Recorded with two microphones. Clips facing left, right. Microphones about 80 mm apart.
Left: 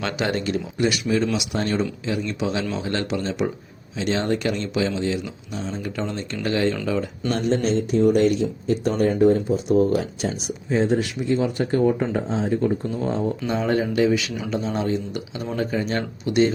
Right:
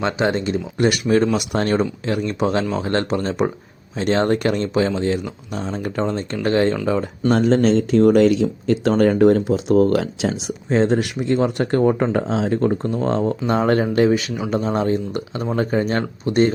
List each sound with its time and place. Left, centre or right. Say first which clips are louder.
0.0 s speech: right 4 dB; right
0.8 s speech: right 5 dB; right
6.0 s speech: right 7 dB; right
7.9 s speech: right 3 dB; right
8.4 s speech: right 4 dB; right
9.0 s speech: right 3 dB; right